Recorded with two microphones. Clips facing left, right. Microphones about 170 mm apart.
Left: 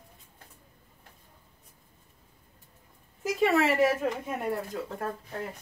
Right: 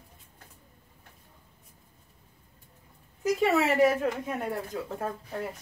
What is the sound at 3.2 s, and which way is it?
Speech, centre (ahead or behind).